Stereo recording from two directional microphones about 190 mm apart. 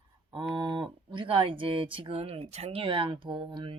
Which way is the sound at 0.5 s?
25° right (ahead or behind).